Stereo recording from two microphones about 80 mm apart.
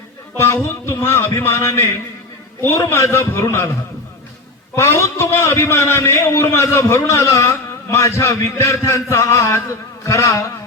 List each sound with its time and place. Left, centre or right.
0.3 s a man's voice: left
4.7 s a man's voice: left